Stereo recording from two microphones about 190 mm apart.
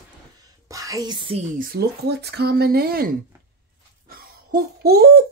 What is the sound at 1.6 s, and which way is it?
Speech, 55° right (ahead or behind).